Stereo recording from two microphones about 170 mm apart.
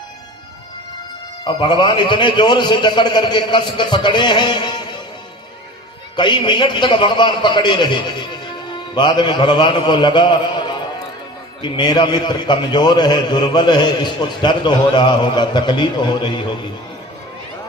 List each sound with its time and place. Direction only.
1.5 s a man's voice: 30° left (ahead or behind)
6.1 s a man's voice: 25° left (ahead or behind)